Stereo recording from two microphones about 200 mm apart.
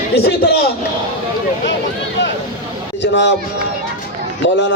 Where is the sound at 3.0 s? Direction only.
60° left (ahead or behind).